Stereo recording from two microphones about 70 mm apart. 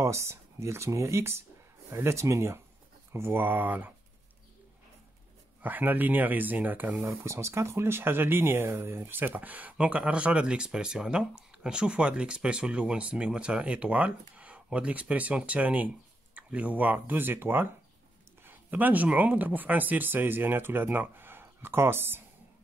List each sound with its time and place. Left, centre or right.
0.0 s speech: right
5.6 s speech: right
7.1 s speech: right